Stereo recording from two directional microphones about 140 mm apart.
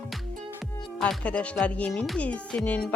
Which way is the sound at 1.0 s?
10° left (ahead or behind).